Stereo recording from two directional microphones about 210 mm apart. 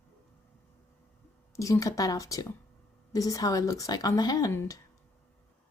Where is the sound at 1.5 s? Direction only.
15° left (ahead or behind).